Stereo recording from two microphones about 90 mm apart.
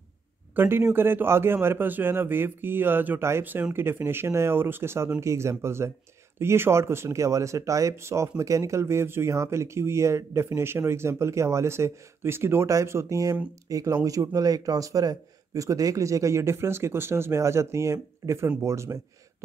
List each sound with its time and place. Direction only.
0.6 s a man's voice: 25° right (ahead or behind)